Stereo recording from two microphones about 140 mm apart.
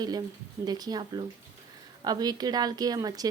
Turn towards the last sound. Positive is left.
turn(degrees=-25)  # may be behind; listen again after turning